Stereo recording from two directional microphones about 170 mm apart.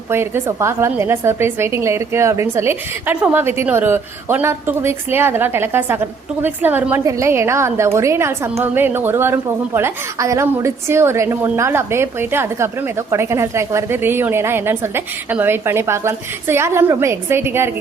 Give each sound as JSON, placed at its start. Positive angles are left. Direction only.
{"t": 0.1, "sound": "a woman's voice", "side_deg": -15}